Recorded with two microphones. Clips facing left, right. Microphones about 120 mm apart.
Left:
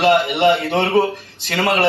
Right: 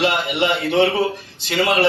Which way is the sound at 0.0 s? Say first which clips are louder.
Left 5 dB; 45° left (ahead or behind).